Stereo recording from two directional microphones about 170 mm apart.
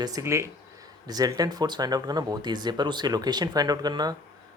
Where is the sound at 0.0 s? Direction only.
20° right (ahead or behind).